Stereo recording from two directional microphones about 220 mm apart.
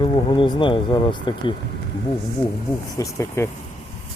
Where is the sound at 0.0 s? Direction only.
20° left (ahead or behind).